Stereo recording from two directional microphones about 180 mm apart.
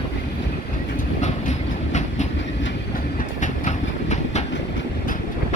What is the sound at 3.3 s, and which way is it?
Train, 40° left (ahead or behind).